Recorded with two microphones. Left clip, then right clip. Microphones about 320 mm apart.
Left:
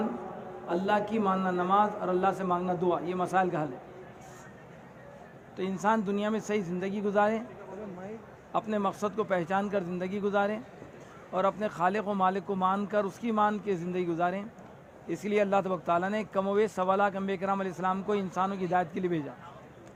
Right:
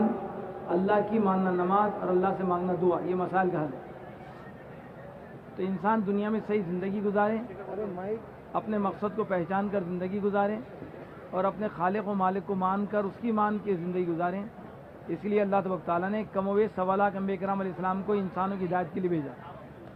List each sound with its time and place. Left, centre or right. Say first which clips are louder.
0.7 s speech: right 2 dB; left
5.5 s speech: even; left
8.5 s speech: even; left